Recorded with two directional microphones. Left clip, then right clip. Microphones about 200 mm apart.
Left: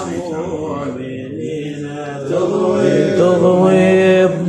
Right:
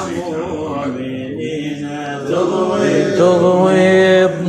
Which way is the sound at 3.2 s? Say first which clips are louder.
Right 2 dB; 20° left (ahead or behind).